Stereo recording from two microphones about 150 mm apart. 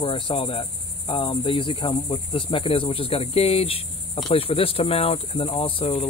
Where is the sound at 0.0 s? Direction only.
35° left (ahead or behind).